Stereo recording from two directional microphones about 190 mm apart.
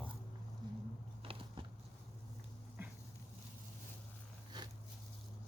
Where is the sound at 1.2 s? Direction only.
30° right (ahead or behind).